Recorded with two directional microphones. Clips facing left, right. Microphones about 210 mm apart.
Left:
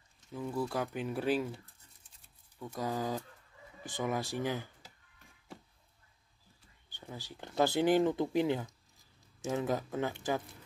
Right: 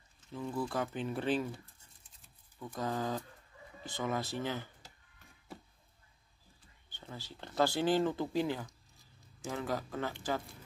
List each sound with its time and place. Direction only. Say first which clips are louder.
0.3 s speech: left 1 dB; 10° left (ahead or behind)
2.6 s speech: left 1 dB; 10° left (ahead or behind)
6.9 s speech: left 2 dB; 15° left (ahead or behind)